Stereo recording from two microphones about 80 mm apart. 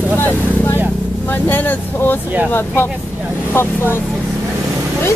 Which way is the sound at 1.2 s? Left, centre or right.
Left.